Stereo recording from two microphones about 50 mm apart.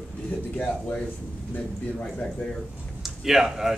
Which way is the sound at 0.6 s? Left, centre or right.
Centre.